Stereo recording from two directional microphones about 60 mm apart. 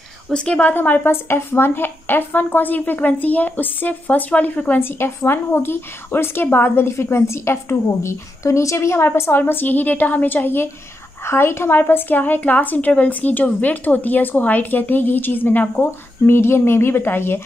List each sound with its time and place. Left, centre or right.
0.3 s a woman's voice: centre
0.7 s a woman's voice: left
4.8 s a woman's voice: left
16.3 s a woman's voice: left